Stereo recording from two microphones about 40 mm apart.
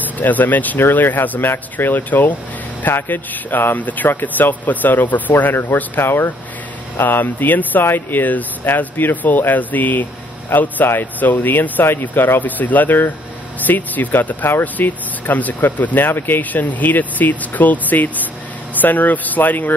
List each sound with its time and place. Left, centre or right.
0.2 s speech: left
0.7 s speech: left
5.5 s speech: left
5.9 s speech: left
7.0 s speech: left
16.1 s speech: left